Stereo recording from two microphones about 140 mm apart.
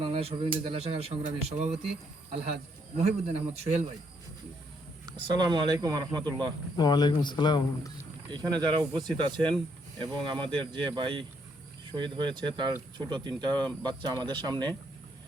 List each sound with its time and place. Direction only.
0.0 s speech: 45° right (ahead or behind)
3.0 s speech: 50° right (ahead or behind)
5.0 s speech: 30° right (ahead or behind)
6.7 s speech: 30° left (ahead or behind)
8.3 s speech: 30° right (ahead or behind)